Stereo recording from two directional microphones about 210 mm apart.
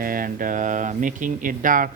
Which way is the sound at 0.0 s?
40° right (ahead or behind).